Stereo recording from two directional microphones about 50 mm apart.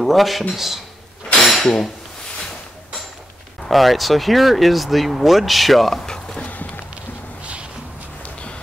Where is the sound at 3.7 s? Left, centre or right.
Centre.